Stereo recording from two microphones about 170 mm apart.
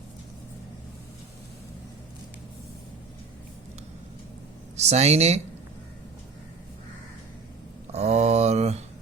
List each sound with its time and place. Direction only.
4.8 s speech: 40° right (ahead or behind)
7.9 s mantra: 40° right (ahead or behind)